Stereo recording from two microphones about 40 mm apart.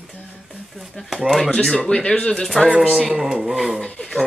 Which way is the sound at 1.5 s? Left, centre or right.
Centre.